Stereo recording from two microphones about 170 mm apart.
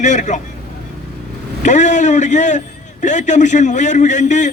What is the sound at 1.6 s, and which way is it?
A man's voice, 45° left (ahead or behind).